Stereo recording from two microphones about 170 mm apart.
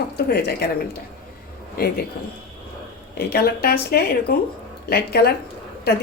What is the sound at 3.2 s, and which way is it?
Speech, 70° left (ahead or behind).